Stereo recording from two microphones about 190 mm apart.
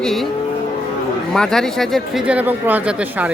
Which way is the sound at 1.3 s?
5° left (ahead or behind).